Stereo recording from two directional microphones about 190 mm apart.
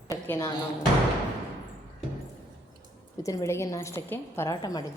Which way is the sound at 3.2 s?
15° left (ahead or behind).